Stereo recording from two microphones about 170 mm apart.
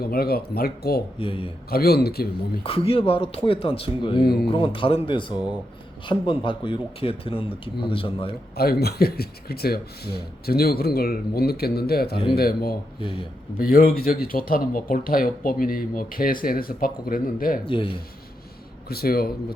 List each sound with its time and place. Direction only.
0.0 s speech: 65° left (ahead or behind)
1.2 s speech: 30° left (ahead or behind)
1.7 s speech: 65° left (ahead or behind)
2.6 s speech: 35° left (ahead or behind)
6.4 s speech: 30° left (ahead or behind)
8.5 s speech: 65° left (ahead or behind)
17.7 s speech: 30° left (ahead or behind)
18.9 s speech: 65° left (ahead or behind)